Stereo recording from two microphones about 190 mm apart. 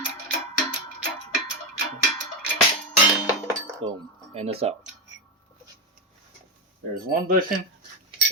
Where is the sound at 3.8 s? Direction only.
30° right (ahead or behind).